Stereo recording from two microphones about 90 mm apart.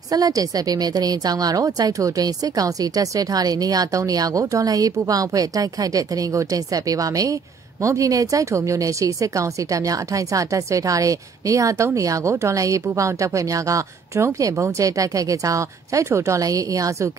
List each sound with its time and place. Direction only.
0.1 s a woman's voice: 45° right (ahead or behind)